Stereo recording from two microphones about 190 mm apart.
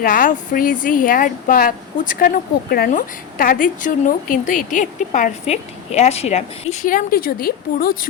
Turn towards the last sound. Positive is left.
turn(degrees=50)  # may be behind; listen again after turning